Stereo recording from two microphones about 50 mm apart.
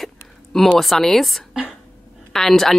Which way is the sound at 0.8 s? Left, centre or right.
Centre.